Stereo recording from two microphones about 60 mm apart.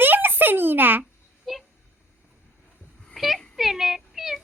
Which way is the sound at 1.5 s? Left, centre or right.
Centre.